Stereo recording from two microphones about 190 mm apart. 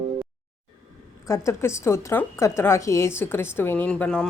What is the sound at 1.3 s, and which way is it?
Speech, 15° left (ahead or behind).